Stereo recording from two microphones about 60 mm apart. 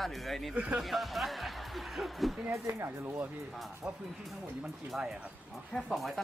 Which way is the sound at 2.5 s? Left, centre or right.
Right.